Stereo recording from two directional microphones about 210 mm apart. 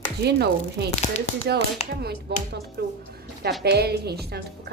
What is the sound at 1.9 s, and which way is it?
A woman's voice, 50° right (ahead or behind).